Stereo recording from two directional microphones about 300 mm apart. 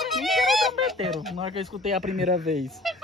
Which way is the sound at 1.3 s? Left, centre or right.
Centre.